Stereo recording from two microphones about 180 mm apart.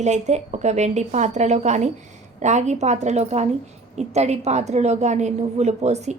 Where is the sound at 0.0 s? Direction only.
40° right (ahead or behind).